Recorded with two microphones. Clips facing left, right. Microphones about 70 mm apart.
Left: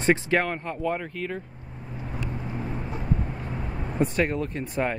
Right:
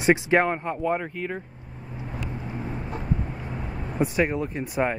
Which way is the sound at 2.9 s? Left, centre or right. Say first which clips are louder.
Even; centre.